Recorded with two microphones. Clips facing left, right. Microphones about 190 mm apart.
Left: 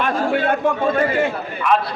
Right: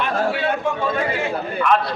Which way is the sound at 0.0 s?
50° left (ahead or behind).